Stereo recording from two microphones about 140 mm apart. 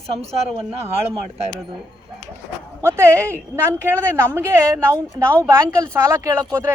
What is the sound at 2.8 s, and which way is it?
A woman's voice, 20° right (ahead or behind).